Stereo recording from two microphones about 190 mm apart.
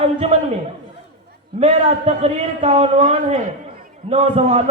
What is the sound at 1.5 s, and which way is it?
A man's voice, 35° right (ahead or behind).